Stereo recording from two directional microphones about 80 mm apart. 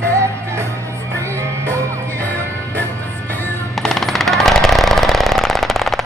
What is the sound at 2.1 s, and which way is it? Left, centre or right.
Music, centre.